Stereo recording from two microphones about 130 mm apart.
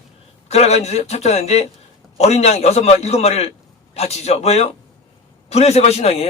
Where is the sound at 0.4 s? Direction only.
55° left (ahead or behind).